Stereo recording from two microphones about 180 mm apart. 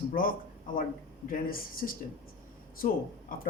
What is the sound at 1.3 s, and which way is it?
Speech, 50° left (ahead or behind).